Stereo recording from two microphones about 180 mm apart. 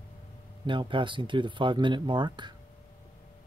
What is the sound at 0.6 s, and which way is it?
Speech, 25° right (ahead or behind).